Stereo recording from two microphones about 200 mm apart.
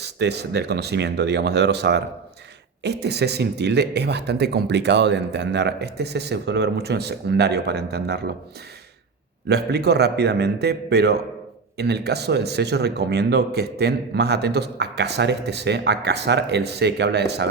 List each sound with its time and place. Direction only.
0.0 s speech: 55° right (ahead or behind)
9.5 s speech: 55° right (ahead or behind)